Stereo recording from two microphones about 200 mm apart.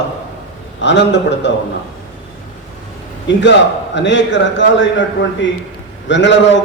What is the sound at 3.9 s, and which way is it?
A man's voice, 65° left (ahead or behind).